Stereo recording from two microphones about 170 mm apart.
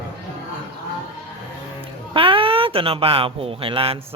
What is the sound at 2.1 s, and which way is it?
Speech, 30° right (ahead or behind).